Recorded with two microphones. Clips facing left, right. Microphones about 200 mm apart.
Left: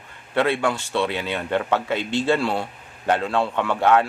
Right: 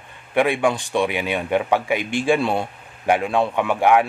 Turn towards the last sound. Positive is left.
turn(degrees=-15)  # may be behind; listen again after turning